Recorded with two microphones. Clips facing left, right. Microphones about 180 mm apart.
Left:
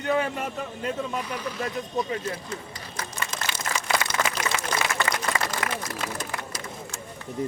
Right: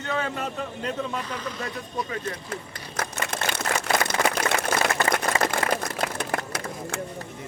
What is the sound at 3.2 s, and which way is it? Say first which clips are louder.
Typewriter: right 4 dB; 60° right (ahead or behind).